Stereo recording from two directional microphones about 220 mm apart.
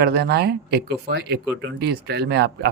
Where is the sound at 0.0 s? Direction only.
45° right (ahead or behind).